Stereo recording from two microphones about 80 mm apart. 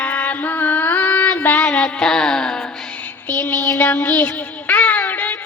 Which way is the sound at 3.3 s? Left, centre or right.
Left.